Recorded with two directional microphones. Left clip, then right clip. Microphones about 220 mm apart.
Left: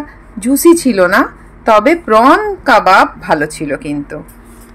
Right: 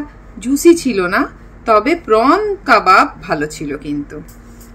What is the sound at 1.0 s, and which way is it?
A woman's voice, 25° left (ahead or behind).